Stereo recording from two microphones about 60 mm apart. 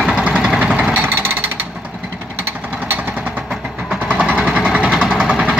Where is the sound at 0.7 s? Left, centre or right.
Right.